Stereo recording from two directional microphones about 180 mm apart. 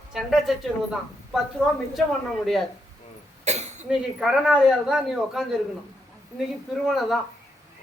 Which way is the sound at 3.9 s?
5° right (ahead or behind).